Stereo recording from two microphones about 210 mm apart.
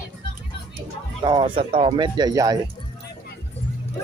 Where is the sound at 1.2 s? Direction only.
20° right (ahead or behind).